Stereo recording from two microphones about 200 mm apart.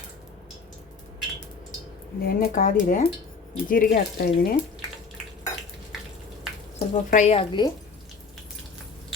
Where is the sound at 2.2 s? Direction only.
45° left (ahead or behind).